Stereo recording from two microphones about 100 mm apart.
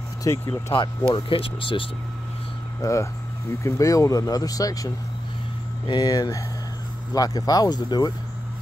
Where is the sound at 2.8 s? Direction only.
30° left (ahead or behind).